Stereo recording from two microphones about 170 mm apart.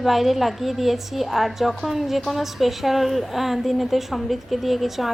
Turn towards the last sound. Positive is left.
turn(degrees=0)  # may be behind; listen again after turning